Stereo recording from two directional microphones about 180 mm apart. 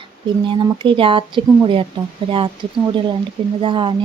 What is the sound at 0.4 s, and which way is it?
A woman's voice, 30° right (ahead or behind).